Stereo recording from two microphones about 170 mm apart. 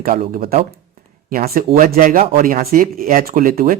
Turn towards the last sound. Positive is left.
turn(degrees=-55)  # may be behind; listen again after turning